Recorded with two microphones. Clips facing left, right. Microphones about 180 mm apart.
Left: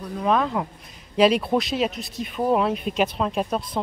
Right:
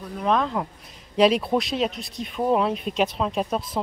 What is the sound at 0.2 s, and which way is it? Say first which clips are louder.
Speech: left 1 dB; 5° left (ahead or behind).